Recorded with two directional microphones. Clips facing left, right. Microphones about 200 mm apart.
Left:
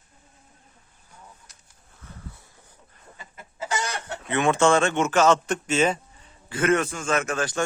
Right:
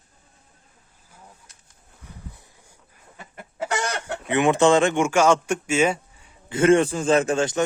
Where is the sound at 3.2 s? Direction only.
60° right (ahead or behind).